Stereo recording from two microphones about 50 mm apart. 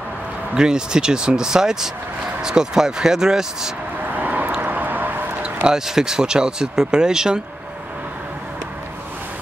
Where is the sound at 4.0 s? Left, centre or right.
Right.